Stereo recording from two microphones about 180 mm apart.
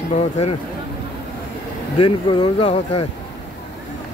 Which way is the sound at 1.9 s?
30° left (ahead or behind).